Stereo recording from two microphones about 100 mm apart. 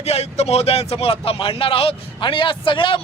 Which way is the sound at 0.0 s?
90° left.